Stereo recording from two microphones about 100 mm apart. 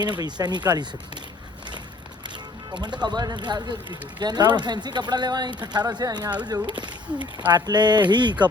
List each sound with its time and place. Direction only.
0.0 s speech: 45° right (ahead or behind)
3.0 s speech: 45° right (ahead or behind)